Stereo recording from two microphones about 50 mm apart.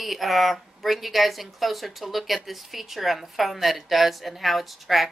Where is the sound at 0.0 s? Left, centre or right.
Centre.